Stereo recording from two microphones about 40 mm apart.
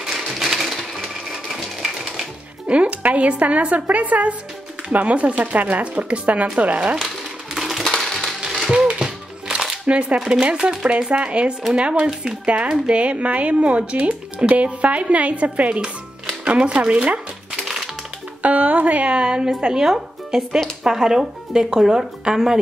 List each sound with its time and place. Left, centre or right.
0.3 s crushing: centre
1.3 s a sound: centre
2.7 s speech: right
7.5 s a sound: centre
7.8 s music: centre
8.6 s typewriter: centre
8.9 s music: right
9.8 s speech: right
18.4 s music: right
19.0 s speech: right